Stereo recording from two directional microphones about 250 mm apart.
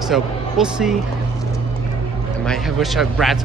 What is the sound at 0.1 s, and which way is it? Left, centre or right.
Speech, centre.